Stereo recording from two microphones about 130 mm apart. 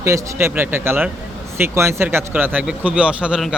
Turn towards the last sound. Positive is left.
turn(degrees=-5)  # may be behind; listen again after turning